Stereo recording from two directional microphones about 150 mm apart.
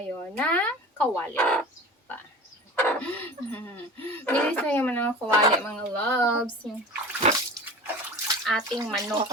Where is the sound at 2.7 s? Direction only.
10° left (ahead or behind).